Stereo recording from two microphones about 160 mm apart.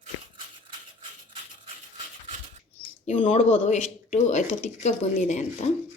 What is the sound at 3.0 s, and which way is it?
Speech, 40° left (ahead or behind).